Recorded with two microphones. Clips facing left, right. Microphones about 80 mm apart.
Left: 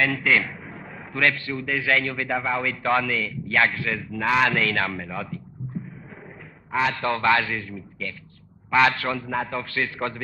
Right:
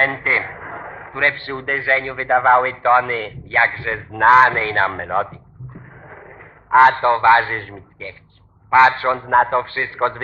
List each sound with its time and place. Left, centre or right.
0.0 s a man's voice: right
0.6 s a sound: right
0.9 s a sound: right
1.4 s a man's voice: right
1.9 s a man's voice: right
6.7 s a man's voice: right
7.0 s a man's voice: right
8.0 s a man's voice: right